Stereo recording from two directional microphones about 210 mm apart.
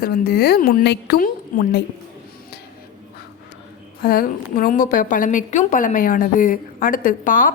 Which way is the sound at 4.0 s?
45° left (ahead or behind).